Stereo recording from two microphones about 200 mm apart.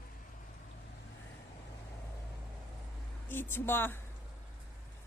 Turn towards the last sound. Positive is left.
turn(degrees=10)  # may be behind; listen again after turning